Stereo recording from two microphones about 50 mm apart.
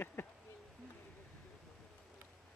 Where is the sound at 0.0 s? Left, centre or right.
Left.